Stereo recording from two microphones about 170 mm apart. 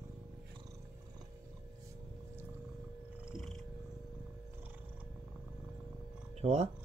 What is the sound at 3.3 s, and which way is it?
Cat, centre (ahead or behind).